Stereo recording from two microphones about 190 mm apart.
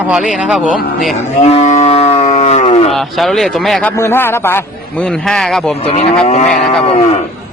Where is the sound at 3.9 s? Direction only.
10° left (ahead or behind).